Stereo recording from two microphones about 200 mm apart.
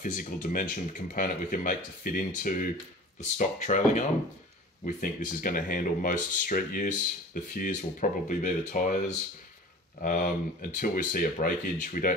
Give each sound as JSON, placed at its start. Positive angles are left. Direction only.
{"t": 0.0, "sound": "speech", "side_deg": 40}